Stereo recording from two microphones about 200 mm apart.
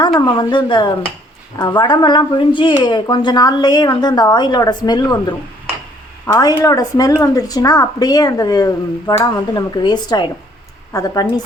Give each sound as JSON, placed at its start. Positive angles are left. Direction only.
{"t": 0.0, "sound": "a woman's voice", "side_deg": 20}